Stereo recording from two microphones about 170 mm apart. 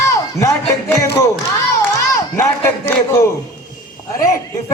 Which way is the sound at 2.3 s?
15° left (ahead or behind).